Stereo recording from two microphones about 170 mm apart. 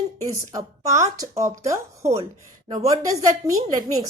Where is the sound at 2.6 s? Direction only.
30° right (ahead or behind).